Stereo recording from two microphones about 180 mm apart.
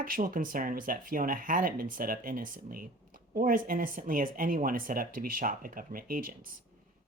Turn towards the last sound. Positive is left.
turn(degrees=-50)  # may be behind; listen again after turning